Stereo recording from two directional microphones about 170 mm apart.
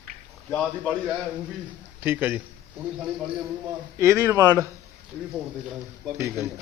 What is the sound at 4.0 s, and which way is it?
Speech, 15° right (ahead or behind).